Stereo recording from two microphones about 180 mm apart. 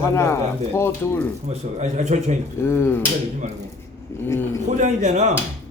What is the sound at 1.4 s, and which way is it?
Speech, 40° right (ahead or behind).